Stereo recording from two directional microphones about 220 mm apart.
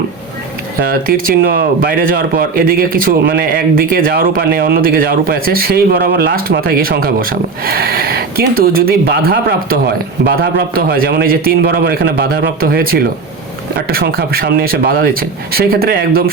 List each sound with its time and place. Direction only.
0.8 s a man's voice: 40° right (ahead or behind)